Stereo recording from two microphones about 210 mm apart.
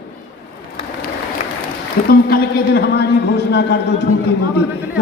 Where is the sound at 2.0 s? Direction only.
50° left (ahead or behind).